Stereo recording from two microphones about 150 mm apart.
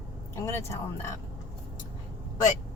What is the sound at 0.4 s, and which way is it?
Speech, 20° left (ahead or behind).